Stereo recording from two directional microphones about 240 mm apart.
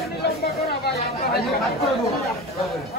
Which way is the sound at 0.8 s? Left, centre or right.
Left.